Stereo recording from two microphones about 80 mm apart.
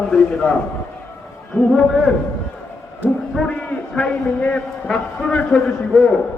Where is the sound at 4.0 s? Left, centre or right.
Centre.